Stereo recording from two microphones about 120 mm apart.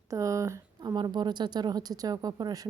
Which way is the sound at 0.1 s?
25° right (ahead or behind).